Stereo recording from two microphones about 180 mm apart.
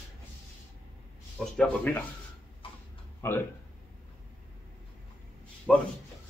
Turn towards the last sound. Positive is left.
turn(degrees=5)  # may be behind; listen again after turning